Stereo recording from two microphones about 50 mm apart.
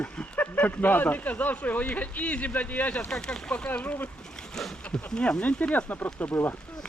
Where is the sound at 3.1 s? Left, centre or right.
Centre.